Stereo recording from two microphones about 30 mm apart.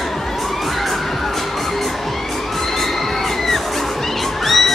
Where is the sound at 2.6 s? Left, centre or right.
Centre.